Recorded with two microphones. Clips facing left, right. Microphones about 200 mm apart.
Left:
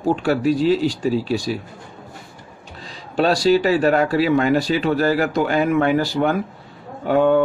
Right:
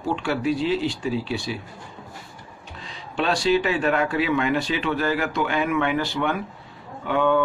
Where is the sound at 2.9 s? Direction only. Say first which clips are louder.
Left 6 dB; 40° left (ahead or behind).